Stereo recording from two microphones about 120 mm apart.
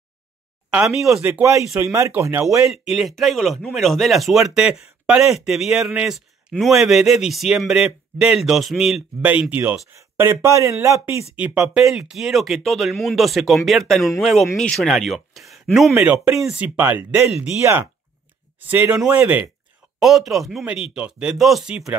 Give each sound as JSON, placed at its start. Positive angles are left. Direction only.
{"t": 0.7, "sound": "speech", "side_deg": -5}
{"t": 1.4, "sound": "speech", "side_deg": -25}
{"t": 2.7, "sound": "a man's voice", "side_deg": -5}
{"t": 11.6, "sound": "a man's voice", "side_deg": -5}